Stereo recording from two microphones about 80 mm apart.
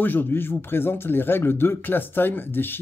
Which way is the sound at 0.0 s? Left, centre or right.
Left.